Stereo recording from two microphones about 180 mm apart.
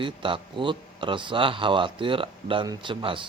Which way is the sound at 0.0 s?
30° right (ahead or behind).